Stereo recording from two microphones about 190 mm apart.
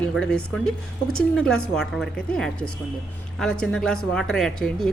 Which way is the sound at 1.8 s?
5° left (ahead or behind).